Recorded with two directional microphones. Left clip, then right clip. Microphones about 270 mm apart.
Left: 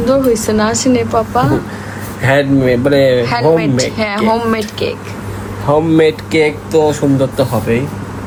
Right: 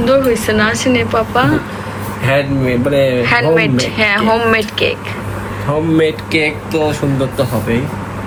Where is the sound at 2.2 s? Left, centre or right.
Left.